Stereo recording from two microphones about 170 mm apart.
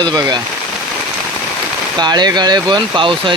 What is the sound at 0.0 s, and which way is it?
Speech, 25° right (ahead or behind).